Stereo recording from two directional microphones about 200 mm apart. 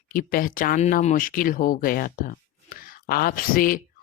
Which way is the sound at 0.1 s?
45° left (ahead or behind).